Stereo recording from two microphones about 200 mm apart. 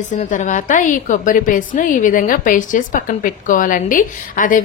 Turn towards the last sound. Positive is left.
turn(degrees=40)  # may be behind; listen again after turning